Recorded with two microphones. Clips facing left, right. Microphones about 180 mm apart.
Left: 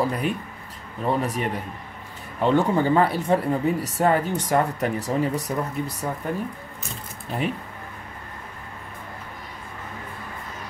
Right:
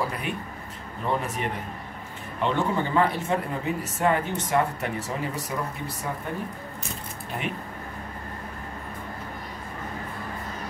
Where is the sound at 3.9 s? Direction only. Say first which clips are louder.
Left 1 dB; 40° left (ahead or behind).